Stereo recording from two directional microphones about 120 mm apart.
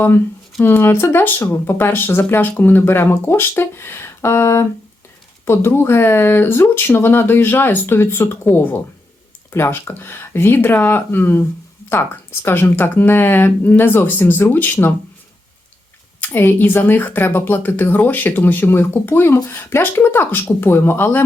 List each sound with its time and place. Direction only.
0.6 s a woman's voice: 20° left (ahead or behind)
16.2 s a woman's voice: 15° left (ahead or behind)